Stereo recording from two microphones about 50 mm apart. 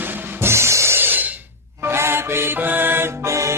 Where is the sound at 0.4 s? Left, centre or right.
Right.